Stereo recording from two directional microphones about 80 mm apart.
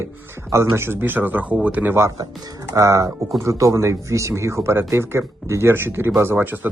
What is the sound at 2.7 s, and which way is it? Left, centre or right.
Speech, right.